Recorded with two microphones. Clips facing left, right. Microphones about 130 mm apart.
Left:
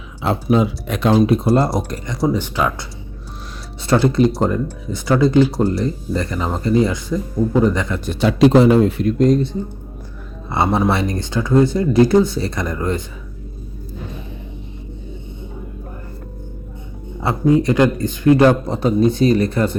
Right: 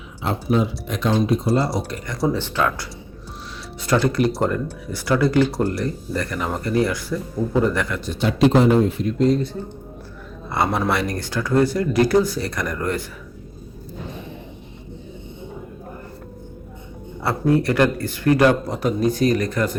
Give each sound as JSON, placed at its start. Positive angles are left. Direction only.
{"t": 0.3, "sound": "speech", "side_deg": 90}
{"t": 1.3, "sound": "speech", "side_deg": 60}
{"t": 2.0, "sound": "speech", "side_deg": 15}
{"t": 3.8, "sound": "speech", "side_deg": 25}
{"t": 8.0, "sound": "speech", "side_deg": 75}
{"t": 10.5, "sound": "speech", "side_deg": 25}
{"t": 17.2, "sound": "speech", "side_deg": 20}